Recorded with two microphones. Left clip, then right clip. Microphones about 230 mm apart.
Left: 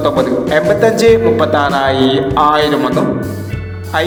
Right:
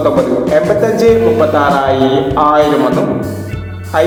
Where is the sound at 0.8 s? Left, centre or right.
Left.